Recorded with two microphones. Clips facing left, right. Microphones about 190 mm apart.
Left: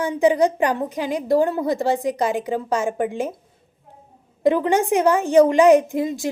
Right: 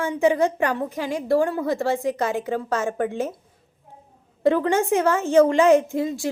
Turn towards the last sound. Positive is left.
turn(degrees=15)  # may be behind; listen again after turning